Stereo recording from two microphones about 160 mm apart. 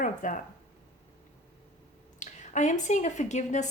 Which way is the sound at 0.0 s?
55° left (ahead or behind).